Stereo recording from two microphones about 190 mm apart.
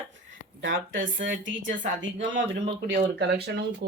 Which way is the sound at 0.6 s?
80° right.